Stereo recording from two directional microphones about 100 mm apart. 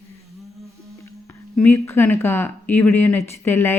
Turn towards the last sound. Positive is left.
turn(degrees=20)  # may be behind; listen again after turning